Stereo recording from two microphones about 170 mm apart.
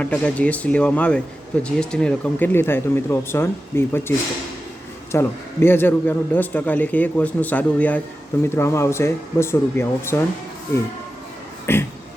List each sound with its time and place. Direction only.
0.0 s speech: 10° left (ahead or behind)
5.1 s speech: 15° left (ahead or behind)
11.6 s a sound: 15° left (ahead or behind)